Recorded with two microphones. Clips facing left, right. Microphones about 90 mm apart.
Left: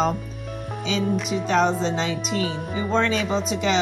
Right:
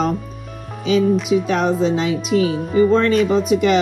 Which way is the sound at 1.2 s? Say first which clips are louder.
Right 3 dB; 10° right (ahead or behind).